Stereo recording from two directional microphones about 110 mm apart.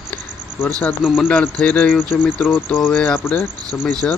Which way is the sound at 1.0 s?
5° right (ahead or behind).